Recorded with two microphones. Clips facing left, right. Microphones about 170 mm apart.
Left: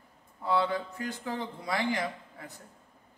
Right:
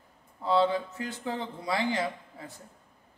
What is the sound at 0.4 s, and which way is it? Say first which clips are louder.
A man's voice: right 3 dB; 25° right (ahead or behind).